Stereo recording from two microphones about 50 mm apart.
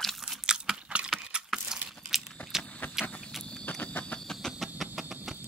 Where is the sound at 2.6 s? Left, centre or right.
Left.